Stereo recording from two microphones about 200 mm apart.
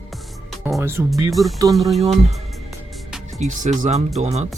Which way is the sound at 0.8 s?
10° right (ahead or behind).